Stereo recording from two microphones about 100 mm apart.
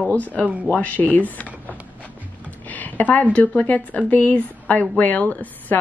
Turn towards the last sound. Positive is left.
turn(degrees=15)  # may be behind; listen again after turning